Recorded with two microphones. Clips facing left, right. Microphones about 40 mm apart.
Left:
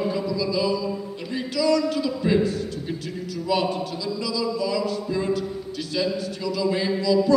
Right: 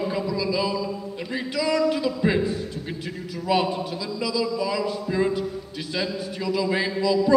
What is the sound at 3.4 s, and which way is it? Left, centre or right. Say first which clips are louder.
Speech: right 1 dB; centre.